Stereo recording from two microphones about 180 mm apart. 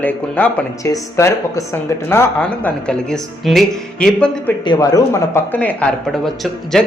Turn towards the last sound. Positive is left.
turn(degrees=0)  # may be behind; listen again after turning